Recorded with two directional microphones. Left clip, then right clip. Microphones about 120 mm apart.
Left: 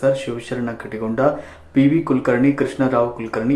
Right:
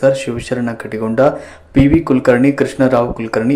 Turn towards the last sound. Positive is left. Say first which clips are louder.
# right 5 dB
turn(degrees=-35)  # may be behind; listen again after turning